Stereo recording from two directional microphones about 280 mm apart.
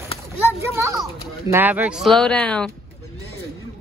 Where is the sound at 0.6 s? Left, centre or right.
Centre.